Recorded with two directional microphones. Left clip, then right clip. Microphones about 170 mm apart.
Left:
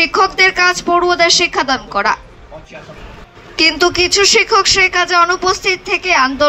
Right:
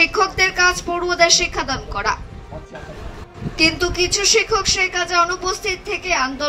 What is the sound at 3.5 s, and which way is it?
A woman's voice, 55° left (ahead or behind).